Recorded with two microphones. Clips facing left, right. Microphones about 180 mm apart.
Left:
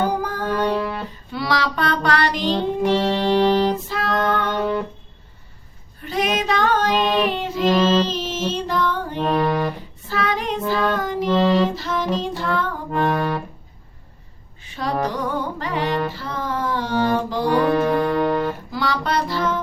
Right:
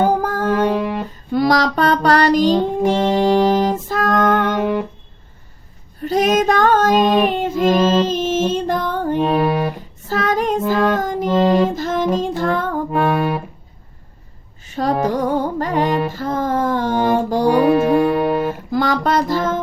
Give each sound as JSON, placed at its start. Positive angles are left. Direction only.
{"t": 0.0, "sound": "music", "side_deg": -50}
{"t": 0.8, "sound": "music", "side_deg": -15}
{"t": 1.3, "sound": "music", "side_deg": -45}
{"t": 4.5, "sound": "music", "side_deg": -10}
{"t": 6.0, "sound": "child singing", "side_deg": -40}
{"t": 7.9, "sound": "music", "side_deg": -50}
{"t": 9.2, "sound": "a sound", "side_deg": -10}
{"t": 10.1, "sound": "child singing", "side_deg": -45}
{"t": 10.7, "sound": "music", "side_deg": -45}
{"t": 13.1, "sound": "music", "side_deg": -10}
{"t": 14.6, "sound": "music", "side_deg": -45}
{"t": 17.5, "sound": "music", "side_deg": -15}
{"t": 18.7, "sound": "music", "side_deg": -45}